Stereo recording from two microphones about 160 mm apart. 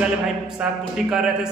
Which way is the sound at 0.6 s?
5° right (ahead or behind).